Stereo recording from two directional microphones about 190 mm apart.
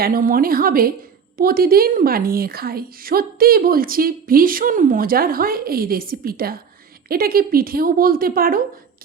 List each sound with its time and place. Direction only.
0.0 s a woman's voice: 50° right (ahead or behind)